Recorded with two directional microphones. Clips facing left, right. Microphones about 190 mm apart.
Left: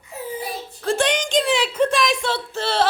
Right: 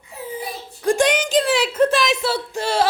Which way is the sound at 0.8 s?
15° right (ahead or behind).